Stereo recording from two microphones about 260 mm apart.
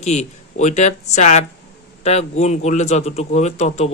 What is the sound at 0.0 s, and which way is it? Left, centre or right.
Speech, left.